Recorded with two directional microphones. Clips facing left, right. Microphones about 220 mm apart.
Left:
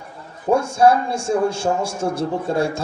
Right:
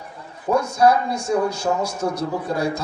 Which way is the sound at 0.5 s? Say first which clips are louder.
Left 2 dB; 30° left (ahead or behind).